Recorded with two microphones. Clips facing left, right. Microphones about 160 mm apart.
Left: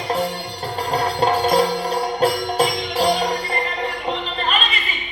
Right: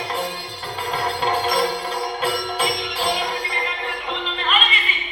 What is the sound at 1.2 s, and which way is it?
Music, 40° left (ahead or behind).